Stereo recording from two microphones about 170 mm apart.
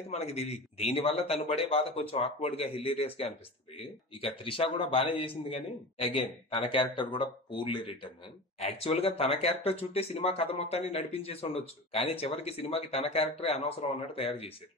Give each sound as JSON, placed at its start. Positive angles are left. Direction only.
{"t": 0.1, "sound": "a man's voice", "side_deg": 40}